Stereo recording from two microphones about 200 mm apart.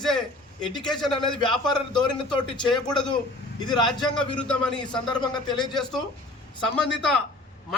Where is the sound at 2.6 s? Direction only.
20° left (ahead or behind).